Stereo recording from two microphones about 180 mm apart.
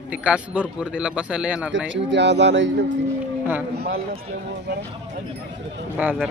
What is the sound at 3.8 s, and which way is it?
Speech, 60° right (ahead or behind).